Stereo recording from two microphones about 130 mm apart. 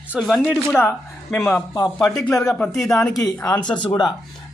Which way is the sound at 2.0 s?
5° left (ahead or behind).